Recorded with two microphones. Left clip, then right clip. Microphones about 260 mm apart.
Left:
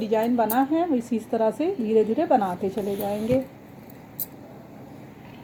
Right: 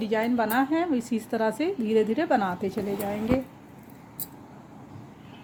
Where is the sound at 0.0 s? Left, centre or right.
Right.